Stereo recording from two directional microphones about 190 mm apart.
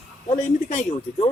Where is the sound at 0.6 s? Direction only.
40° left (ahead or behind).